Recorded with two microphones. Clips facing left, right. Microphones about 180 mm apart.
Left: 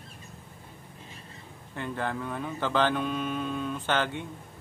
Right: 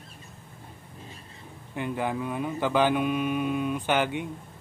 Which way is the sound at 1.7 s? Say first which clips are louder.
Right 3 dB; 15° right (ahead or behind).